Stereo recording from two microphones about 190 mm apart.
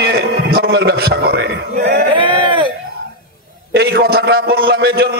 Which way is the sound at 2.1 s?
25° right (ahead or behind).